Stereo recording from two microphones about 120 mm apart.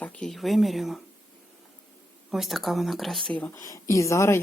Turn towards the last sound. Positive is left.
turn(degrees=25)  # may be behind; listen again after turning